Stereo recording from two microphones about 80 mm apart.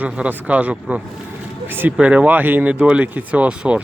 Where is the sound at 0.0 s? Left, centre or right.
Centre.